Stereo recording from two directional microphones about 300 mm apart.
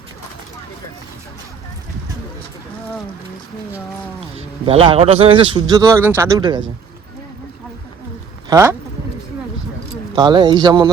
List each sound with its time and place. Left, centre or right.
4.4 s a man's voice: centre
8.4 s a man's voice: centre
10.2 s a man's voice: centre